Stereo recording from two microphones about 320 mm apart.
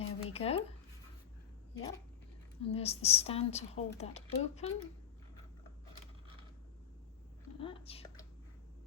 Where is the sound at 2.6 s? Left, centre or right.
Centre.